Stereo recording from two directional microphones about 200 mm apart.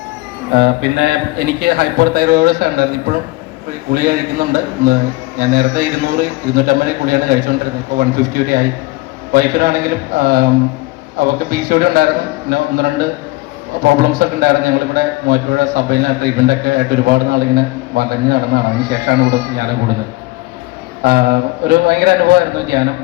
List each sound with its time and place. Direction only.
0.5 s a man's voice: 55° right (ahead or behind)
21.0 s a man's voice: 50° right (ahead or behind)